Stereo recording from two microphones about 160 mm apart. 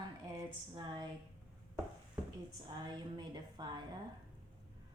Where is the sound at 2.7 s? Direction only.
25° right (ahead or behind).